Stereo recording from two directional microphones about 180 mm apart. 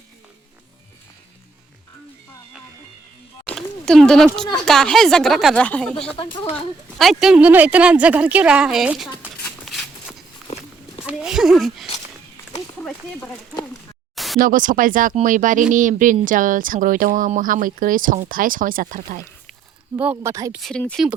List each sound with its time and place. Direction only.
3.4 s a sound: 5° left (ahead or behind)
4.6 s speech: 5° left (ahead or behind)
6.1 s speech: 25° left (ahead or behind)
7.0 s speech: centre (ahead or behind)
9.6 s a sound: centre (ahead or behind)
12.8 s speech: 5° left (ahead or behind)
14.3 s speech: 50° right (ahead or behind)
20.0 s speech: 10° right (ahead or behind)
20.3 s speech: 20° right (ahead or behind)
20.6 s speech: 5° left (ahead or behind)